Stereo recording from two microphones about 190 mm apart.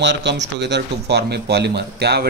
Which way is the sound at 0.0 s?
70° right (ahead or behind).